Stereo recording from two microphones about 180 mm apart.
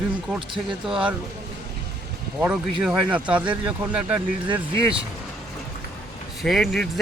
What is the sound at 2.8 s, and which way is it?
Speech, 5° right (ahead or behind).